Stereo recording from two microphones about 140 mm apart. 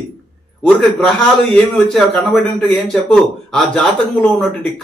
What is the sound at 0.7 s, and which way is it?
A man's voice, 5° left (ahead or behind).